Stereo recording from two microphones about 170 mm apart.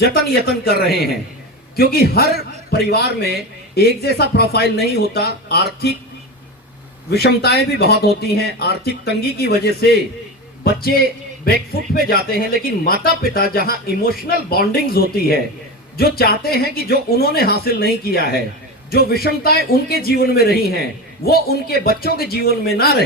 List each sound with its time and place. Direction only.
0.0 s a man's voice: 70° left (ahead or behind)
7.1 s a man's voice: 70° left (ahead or behind)